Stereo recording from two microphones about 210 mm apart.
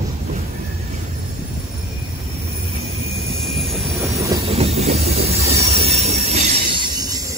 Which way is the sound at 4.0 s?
15° right (ahead or behind).